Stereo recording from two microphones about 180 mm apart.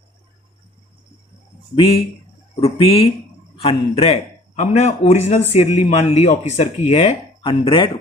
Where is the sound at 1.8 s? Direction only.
35° left (ahead or behind).